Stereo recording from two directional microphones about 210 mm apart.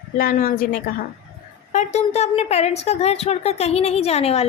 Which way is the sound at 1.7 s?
30° left (ahead or behind).